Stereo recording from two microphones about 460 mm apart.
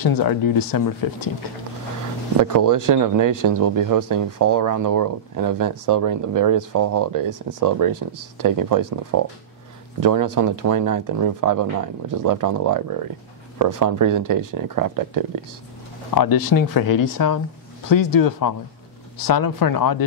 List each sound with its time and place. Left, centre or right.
0.0 s speech: left
2.4 s speech: right
16.2 s speech: left